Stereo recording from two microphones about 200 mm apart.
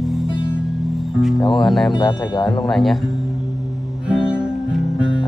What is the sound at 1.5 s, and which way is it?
Music, centre (ahead or behind).